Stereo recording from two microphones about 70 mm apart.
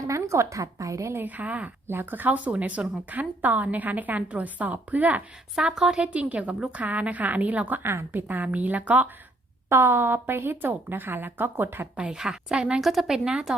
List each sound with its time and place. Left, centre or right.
0.1 s a woman's voice: right
1.1 s a woman's voice: right
5.5 s a woman's voice: centre
7.8 s a woman's voice: right
9.6 s a woman's voice: right
11.9 s a woman's voice: centre